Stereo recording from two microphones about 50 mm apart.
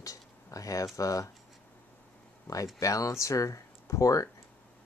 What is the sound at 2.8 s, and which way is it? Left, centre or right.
Speech, left.